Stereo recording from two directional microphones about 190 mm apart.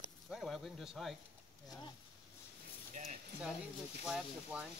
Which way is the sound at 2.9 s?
35° right (ahead or behind).